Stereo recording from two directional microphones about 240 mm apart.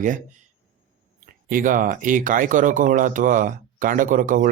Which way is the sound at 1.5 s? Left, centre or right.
Right.